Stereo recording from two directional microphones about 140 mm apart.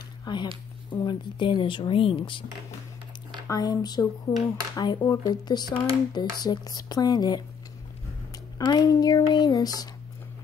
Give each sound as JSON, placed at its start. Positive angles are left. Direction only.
{"t": 0.2, "sound": "a sound", "side_deg": 35}
{"t": 1.0, "sound": "speech", "side_deg": 35}
{"t": 3.4, "sound": "speech", "side_deg": 25}
{"t": 8.5, "sound": "speech", "side_deg": 30}